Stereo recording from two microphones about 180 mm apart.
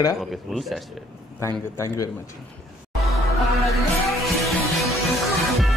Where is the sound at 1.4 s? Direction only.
15° left (ahead or behind).